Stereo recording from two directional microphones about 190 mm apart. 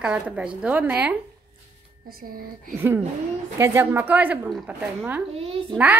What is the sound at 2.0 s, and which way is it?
Speech, 50° right (ahead or behind).